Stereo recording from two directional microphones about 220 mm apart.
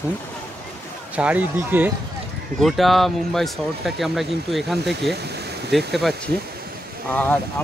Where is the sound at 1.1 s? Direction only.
5° right (ahead or behind).